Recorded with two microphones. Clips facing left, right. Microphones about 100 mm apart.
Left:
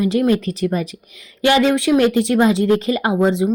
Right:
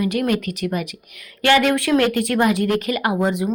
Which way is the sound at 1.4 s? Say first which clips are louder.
Left 2 dB; 20° left (ahead or behind).